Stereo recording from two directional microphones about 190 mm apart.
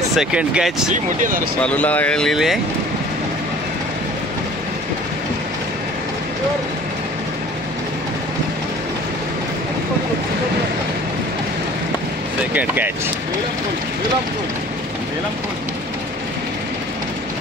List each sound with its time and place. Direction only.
0.1 s speech: 5° right (ahead or behind)
0.9 s speech: 45° right (ahead or behind)
1.6 s speech: 5° left (ahead or behind)
12.5 s speech: 10° right (ahead or behind)